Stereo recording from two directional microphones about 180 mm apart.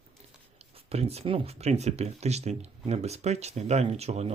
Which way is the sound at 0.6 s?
35° right (ahead or behind).